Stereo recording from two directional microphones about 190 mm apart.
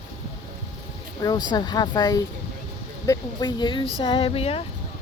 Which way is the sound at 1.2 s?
20° left (ahead or behind).